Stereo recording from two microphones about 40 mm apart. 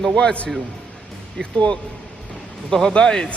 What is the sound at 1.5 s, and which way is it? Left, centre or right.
A man's voice, left.